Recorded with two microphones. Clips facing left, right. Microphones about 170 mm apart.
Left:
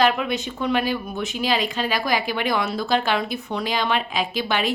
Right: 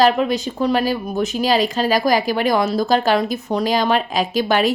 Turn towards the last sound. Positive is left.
turn(degrees=-45)  # may be behind; listen again after turning